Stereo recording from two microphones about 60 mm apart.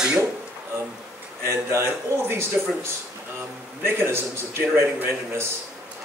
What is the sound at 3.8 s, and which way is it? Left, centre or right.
Speech, right.